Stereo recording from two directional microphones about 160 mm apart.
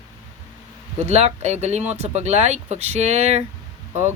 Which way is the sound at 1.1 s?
40° right (ahead or behind).